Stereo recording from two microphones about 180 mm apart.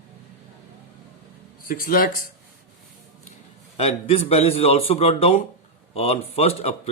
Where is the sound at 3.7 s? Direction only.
35° left (ahead or behind).